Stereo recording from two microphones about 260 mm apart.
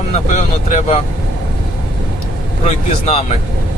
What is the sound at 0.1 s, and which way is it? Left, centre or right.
Speech, left.